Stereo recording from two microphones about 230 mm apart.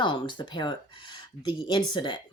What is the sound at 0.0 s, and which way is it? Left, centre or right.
Speech, centre.